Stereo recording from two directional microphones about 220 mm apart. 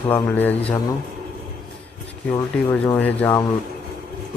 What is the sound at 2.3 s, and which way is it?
Speech, 10° left (ahead or behind).